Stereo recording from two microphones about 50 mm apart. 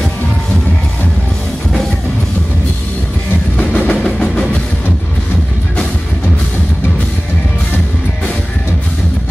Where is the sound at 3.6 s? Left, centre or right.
Left.